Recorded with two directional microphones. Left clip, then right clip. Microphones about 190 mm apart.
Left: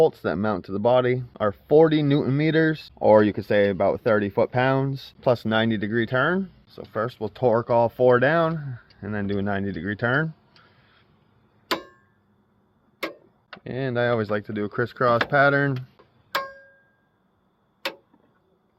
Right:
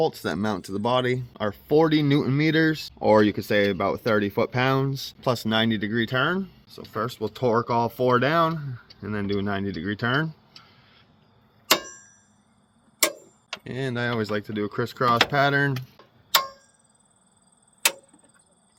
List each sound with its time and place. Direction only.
0.0 s speech: 15° left (ahead or behind)
13.7 s speech: 25° left (ahead or behind)